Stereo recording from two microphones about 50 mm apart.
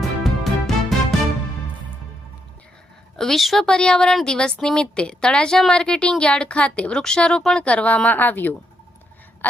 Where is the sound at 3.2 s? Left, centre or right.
Centre.